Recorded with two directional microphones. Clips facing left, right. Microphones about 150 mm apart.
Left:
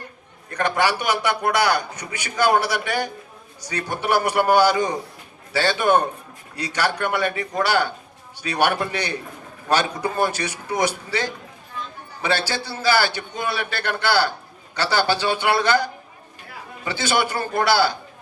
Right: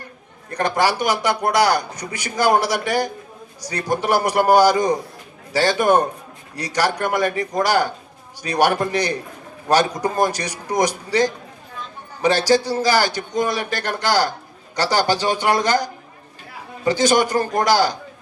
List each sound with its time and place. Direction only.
0.5 s a man's voice: 40° right (ahead or behind)